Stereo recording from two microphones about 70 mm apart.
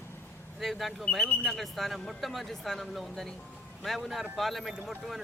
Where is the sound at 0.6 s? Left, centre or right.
Centre.